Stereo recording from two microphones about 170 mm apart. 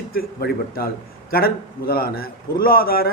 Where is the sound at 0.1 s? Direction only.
60° left (ahead or behind).